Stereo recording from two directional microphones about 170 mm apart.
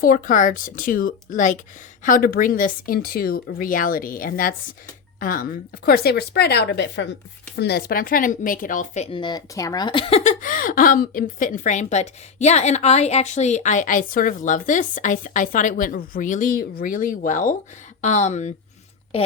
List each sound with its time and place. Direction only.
0.0 s speech: 50° left (ahead or behind)